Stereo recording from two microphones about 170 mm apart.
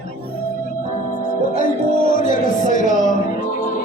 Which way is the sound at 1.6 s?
50° left (ahead or behind).